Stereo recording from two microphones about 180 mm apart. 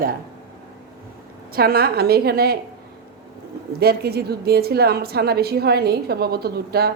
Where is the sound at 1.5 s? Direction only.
55° right (ahead or behind).